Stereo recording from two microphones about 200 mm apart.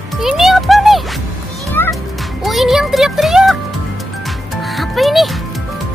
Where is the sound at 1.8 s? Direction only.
10° left (ahead or behind).